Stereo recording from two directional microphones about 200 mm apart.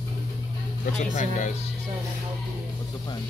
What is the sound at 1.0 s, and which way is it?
Speech, 40° left (ahead or behind).